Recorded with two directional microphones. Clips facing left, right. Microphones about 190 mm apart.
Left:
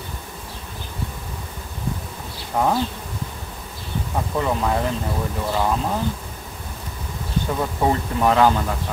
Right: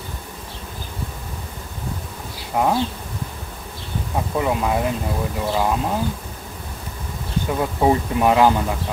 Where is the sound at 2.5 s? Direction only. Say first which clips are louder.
Right 1 dB; 10° right (ahead or behind).